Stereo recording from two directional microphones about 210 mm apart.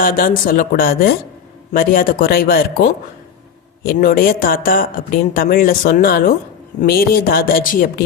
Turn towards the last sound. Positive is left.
turn(degrees=40)  # may be behind; listen again after turning